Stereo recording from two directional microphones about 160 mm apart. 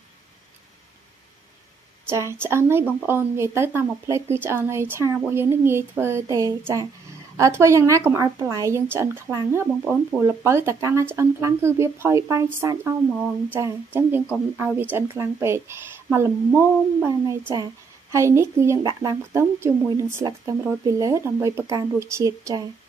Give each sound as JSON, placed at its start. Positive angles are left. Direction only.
{"t": 2.3, "sound": "a woman's voice", "side_deg": -15}